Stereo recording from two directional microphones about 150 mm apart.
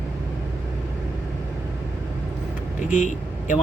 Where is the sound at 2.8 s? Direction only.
55° left (ahead or behind).